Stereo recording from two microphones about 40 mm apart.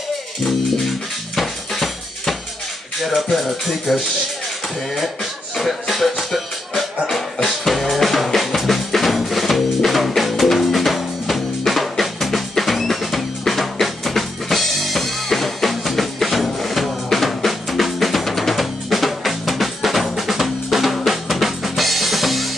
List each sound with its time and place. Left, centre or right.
0.5 s music: centre
4.9 s speech: centre
7.1 s music: centre